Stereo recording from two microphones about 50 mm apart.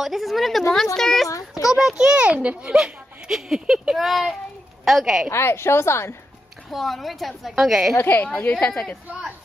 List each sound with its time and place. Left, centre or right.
0.0 s a woman's voice: centre
2.0 s a child's voice: centre
3.9 s a woman's voice: centre
5.3 s a woman's voice: left
6.7 s a woman's voice: centre
8.0 s a woman's voice: left
8.6 s a woman's voice: left